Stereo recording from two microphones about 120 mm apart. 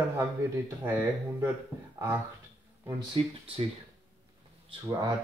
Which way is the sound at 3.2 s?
50° right (ahead or behind).